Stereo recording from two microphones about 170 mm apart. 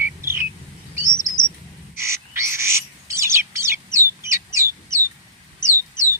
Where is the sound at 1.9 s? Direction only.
15° right (ahead or behind).